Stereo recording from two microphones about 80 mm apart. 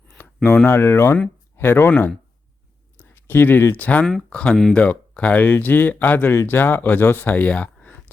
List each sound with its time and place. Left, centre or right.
0.4 s speech: left
4.0 s speech: centre